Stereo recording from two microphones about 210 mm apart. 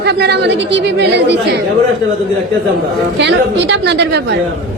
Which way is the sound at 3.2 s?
55° right (ahead or behind).